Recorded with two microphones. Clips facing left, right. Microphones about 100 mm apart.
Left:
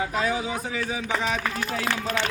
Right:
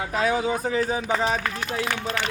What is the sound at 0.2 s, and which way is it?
A man's voice, 55° right (ahead or behind).